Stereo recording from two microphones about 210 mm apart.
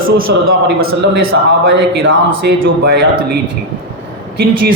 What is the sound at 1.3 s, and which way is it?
A man's voice, 60° right (ahead or behind).